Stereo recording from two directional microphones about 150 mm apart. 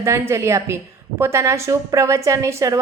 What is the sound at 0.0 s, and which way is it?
A woman's voice, 20° right (ahead or behind).